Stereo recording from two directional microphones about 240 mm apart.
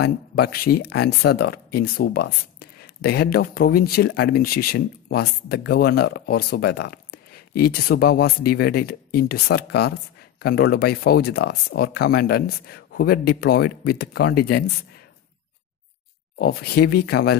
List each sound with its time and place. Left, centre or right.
0.0 s speech: left
16.3 s speech: left